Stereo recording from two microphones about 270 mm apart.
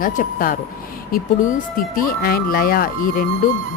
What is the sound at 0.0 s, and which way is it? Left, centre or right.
Speech, left.